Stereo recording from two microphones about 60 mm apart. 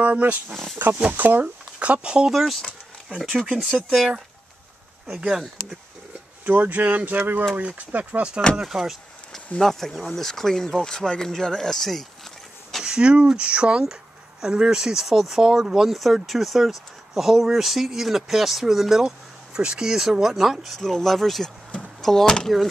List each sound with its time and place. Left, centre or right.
0.0 s speech: right; by 4.1 s centre
5.2 s speech: centre
6.4 s speech: right
8.6 s a sound: centre
9.6 s speech: centre
12.8 s speech: centre